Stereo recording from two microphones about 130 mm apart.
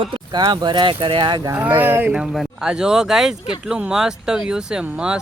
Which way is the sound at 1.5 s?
15° right (ahead or behind).